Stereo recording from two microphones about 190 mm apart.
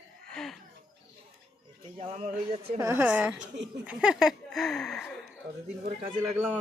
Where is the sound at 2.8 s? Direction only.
15° right (ahead or behind); by 5.2 s 5° left (ahead or behind).